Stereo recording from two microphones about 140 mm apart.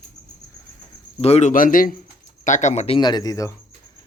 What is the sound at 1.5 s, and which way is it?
Speech, 75° left (ahead or behind).